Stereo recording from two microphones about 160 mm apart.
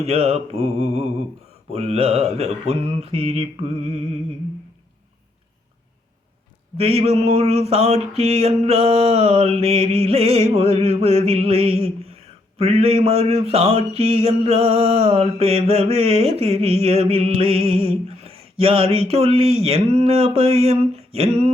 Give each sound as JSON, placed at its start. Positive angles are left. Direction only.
{"t": 0.0, "sound": "mantra", "side_deg": -40}
{"t": 6.7, "sound": "mantra", "side_deg": -40}